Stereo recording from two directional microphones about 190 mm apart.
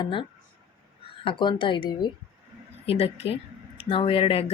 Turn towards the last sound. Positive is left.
turn(degrees=30)  # may be behind; listen again after turning